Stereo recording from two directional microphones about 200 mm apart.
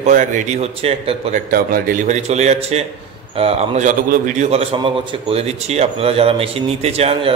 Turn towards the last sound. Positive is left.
turn(degrees=-30)  # may be behind; listen again after turning